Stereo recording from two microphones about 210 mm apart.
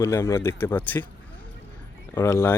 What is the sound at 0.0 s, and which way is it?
Speech, 15° left (ahead or behind).